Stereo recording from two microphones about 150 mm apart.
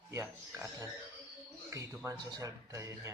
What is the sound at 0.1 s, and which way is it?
Speech, 20° right (ahead or behind).